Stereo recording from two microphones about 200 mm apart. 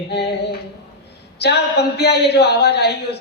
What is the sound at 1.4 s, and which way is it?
Speech, 55° left (ahead or behind).